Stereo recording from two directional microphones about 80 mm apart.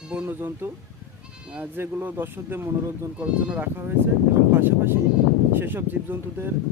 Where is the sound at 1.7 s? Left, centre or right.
Right.